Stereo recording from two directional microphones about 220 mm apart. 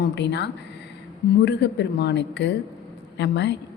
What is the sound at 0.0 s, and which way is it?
A woman's voice, 50° left (ahead or behind).